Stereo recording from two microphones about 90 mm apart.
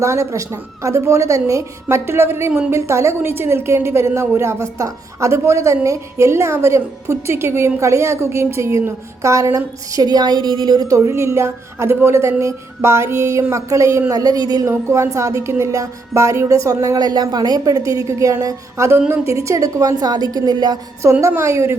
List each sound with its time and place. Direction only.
0.0 s a woman's voice: 35° right (ahead or behind); by 10.9 s 55° right (ahead or behind)
10.9 s a woman's voice: 35° right (ahead or behind)
14.7 s a woman's voice: 30° right (ahead or behind)
18.9 s a woman's voice: 25° right (ahead or behind); by 20.7 s 50° right (ahead or behind)
21.0 s a woman's voice: 35° right (ahead or behind)